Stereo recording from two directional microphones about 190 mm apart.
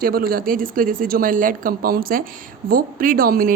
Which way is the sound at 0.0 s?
50° right (ahead or behind).